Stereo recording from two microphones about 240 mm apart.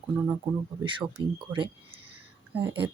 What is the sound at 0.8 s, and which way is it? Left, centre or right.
Speech, centre.